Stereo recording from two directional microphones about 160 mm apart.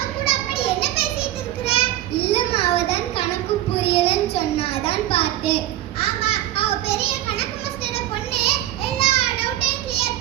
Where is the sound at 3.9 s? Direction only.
40° left (ahead or behind).